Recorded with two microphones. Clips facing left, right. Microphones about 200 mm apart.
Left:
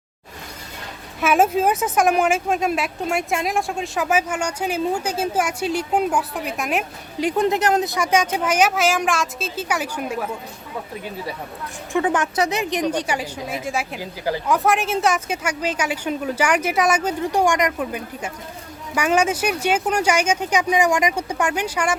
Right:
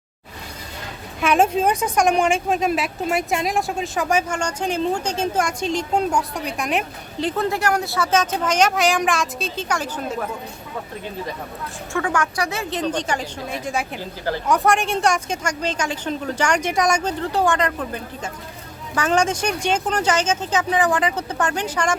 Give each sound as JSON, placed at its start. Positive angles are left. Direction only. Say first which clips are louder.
{"t": 1.2, "sound": "a woman's voice", "louder": "even", "side_deg": 5}
{"t": 11.9, "sound": "a woman's voice", "louder": "left 3 dB", "side_deg": 20}
{"t": 14.0, "sound": "a woman's voice", "louder": "left 1 dB", "side_deg": 10}
{"t": 14.4, "sound": "a woman's voice", "louder": "right 1 dB", "side_deg": 0}